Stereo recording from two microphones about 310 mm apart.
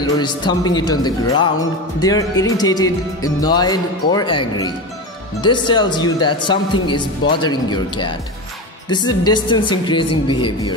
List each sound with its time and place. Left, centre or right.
0.0 s speech: centre